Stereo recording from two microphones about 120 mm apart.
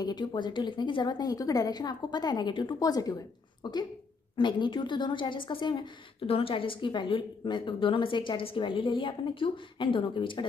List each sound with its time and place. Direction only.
0.0 s a woman's voice: 35° left (ahead or behind)